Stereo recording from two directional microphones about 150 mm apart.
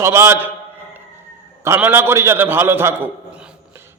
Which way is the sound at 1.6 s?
15° right (ahead or behind).